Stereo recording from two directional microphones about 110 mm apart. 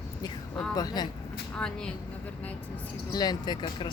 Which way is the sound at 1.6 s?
5° left (ahead or behind).